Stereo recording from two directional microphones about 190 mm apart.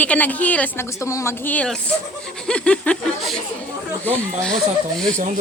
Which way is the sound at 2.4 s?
5° left (ahead or behind).